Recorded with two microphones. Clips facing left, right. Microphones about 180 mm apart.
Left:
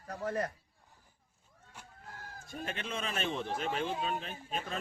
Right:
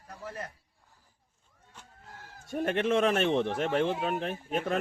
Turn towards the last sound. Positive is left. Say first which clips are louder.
# right 9 dB
turn(degrees=-70)  # may be behind; listen again after turning